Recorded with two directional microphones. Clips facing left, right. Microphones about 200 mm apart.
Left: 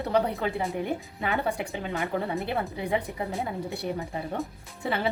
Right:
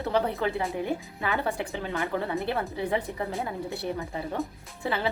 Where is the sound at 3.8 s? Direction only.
15° left (ahead or behind).